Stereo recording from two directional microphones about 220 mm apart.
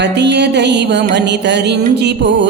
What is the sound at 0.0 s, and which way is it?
Music, 50° right (ahead or behind).